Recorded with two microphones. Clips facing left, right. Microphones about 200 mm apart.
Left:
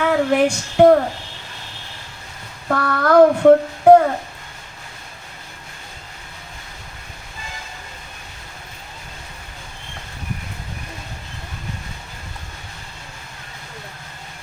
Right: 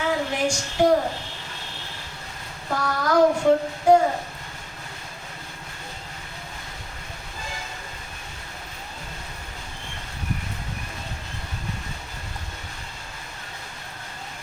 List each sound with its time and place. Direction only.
0.0 s female singing: 60° left (ahead or behind)
2.6 s child singing: 60° left (ahead or behind)